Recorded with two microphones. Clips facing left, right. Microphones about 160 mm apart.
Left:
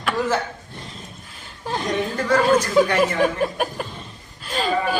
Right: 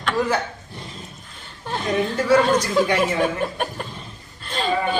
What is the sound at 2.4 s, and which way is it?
Speech, 10° left (ahead or behind).